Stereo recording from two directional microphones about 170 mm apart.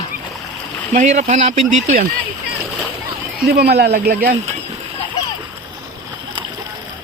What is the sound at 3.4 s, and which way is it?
Speech, 75° right (ahead or behind).